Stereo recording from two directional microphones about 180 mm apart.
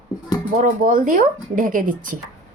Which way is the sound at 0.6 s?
50° right (ahead or behind).